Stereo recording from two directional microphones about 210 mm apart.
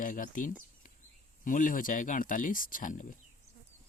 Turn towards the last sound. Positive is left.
turn(degrees=40)  # may be behind; listen again after turning